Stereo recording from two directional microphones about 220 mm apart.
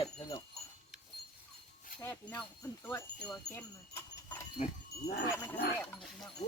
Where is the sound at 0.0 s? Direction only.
20° left (ahead or behind).